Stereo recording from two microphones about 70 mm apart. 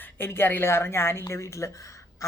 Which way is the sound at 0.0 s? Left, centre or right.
Left.